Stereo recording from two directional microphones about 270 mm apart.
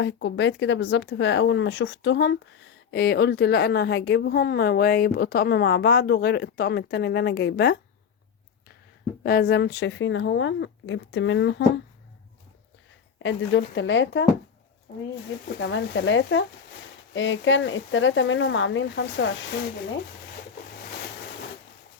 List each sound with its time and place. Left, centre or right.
0.0 s a woman's voice: left
9.2 s a woman's voice: left
13.1 s a woman's voice: left